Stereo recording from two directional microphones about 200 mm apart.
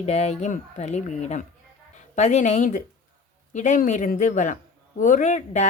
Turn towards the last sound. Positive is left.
turn(degrees=35)  # may be behind; listen again after turning